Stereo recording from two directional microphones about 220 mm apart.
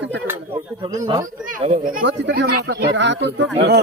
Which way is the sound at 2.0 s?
55° right (ahead or behind).